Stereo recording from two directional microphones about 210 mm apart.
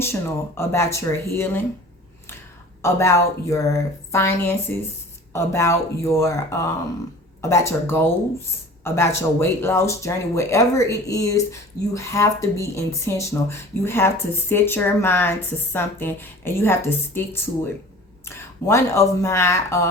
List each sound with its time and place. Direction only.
0.0 s speech: 10° left (ahead or behind)
2.8 s speech: 15° left (ahead or behind)